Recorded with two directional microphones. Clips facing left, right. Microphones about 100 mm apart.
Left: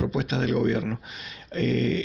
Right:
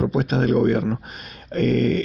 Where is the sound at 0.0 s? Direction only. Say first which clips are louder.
Right 5 dB; 45° right (ahead or behind).